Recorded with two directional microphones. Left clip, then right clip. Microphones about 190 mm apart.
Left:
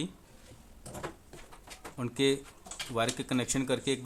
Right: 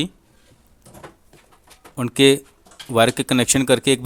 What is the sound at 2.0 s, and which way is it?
Chopping, 45° right (ahead or behind).